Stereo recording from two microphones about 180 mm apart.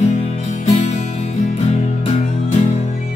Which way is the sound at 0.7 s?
40° left (ahead or behind).